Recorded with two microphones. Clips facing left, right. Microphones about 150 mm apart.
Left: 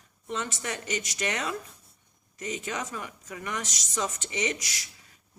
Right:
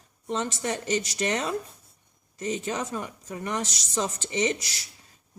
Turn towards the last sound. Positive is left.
turn(degrees=-30)  # may be behind; listen again after turning